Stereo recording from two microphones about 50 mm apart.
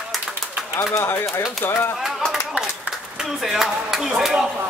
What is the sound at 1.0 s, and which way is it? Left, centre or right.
Speech, left.